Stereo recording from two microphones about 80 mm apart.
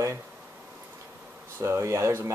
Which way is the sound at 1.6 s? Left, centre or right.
Right.